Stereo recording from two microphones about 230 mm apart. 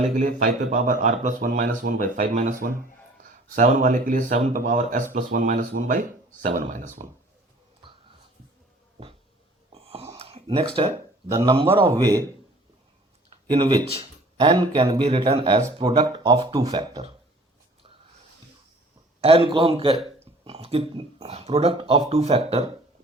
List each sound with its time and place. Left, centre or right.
0.2 s speech: right
9.7 s a sound: right
10.2 s a man's voice: right
13.3 s speech: centre
19.2 s speech: right